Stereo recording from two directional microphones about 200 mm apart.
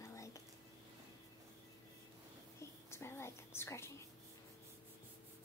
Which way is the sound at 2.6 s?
15° left (ahead or behind).